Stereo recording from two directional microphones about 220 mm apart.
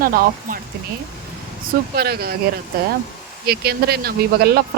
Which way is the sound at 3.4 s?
45° right (ahead or behind).